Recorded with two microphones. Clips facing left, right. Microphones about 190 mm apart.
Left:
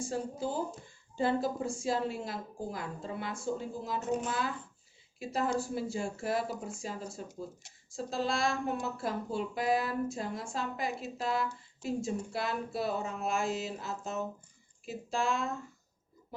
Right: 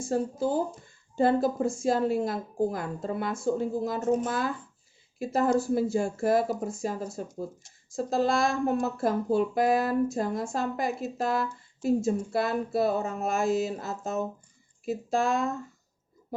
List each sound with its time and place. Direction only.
0.1 s speech: 50° right (ahead or behind)
5.2 s speech: 45° right (ahead or behind)